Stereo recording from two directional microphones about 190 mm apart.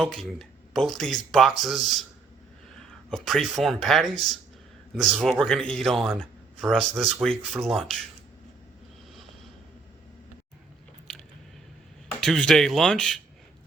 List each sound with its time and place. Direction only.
0.0 s speech: centre (ahead or behind)
3.1 s speech: centre (ahead or behind)
12.2 s speech: 5° left (ahead or behind)